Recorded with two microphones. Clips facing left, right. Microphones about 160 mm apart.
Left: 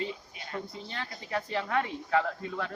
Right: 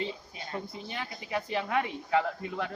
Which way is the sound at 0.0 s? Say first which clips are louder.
Even; 30° right (ahead or behind).